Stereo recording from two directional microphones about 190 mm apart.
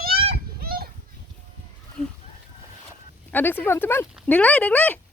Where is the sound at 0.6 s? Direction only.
50° right (ahead or behind).